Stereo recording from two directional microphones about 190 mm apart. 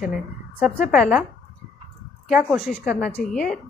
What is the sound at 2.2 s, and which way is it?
A woman's voice, centre (ahead or behind).